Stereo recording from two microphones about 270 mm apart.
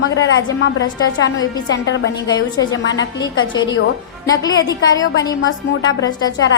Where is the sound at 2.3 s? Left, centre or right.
Centre.